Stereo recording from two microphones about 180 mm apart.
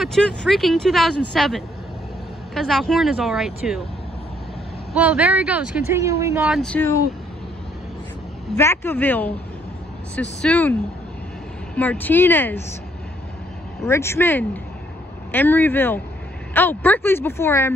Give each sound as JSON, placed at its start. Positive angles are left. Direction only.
{"t": 0.0, "sound": "speech", "side_deg": 5}
{"t": 4.9, "sound": "speech", "side_deg": -5}
{"t": 5.9, "sound": "speech", "side_deg": -15}
{"t": 6.5, "sound": "speech", "side_deg": 5}
{"t": 8.5, "sound": "a woman's voice", "side_deg": 15}
{"t": 10.4, "sound": "a woman's voice", "side_deg": 10}
{"t": 13.8, "sound": "a woman's voice", "side_deg": 15}